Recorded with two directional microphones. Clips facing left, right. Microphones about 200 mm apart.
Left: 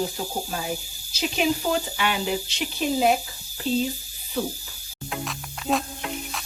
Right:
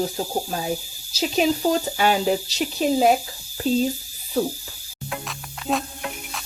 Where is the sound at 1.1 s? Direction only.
35° right (ahead or behind).